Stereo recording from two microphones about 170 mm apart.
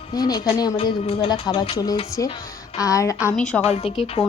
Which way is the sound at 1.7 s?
20° left (ahead or behind).